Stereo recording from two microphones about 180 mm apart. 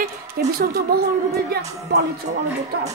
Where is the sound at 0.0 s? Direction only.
55° right (ahead or behind).